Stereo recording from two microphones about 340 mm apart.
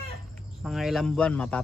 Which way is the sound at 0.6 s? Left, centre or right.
Centre.